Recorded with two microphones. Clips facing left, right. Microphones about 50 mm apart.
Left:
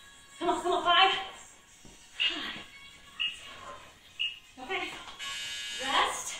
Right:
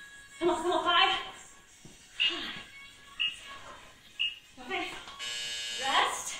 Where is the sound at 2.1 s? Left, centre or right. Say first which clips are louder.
Even; centre.